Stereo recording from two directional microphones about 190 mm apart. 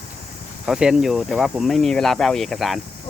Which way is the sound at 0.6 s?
5° right (ahead or behind).